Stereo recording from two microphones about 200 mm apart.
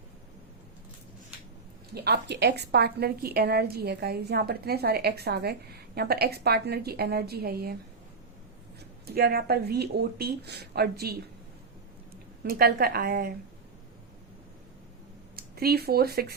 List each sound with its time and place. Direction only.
2.0 s a woman's voice: 55° right (ahead or behind)
9.0 s a woman's voice: 50° right (ahead or behind)
12.4 s a woman's voice: 50° right (ahead or behind)
15.4 s speech: 50° right (ahead or behind)